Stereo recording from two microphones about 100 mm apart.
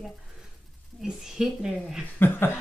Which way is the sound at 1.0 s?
5° right (ahead or behind).